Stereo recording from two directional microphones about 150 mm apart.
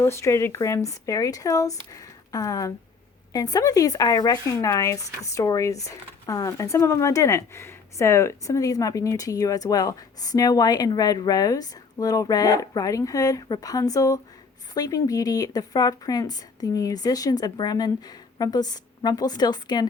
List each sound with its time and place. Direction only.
0.0 s speech: 20° left (ahead or behind)